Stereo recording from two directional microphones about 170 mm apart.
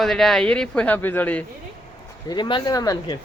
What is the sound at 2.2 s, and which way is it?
Speech, 25° left (ahead or behind).